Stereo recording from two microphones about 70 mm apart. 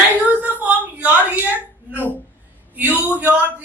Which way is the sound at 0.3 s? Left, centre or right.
Right.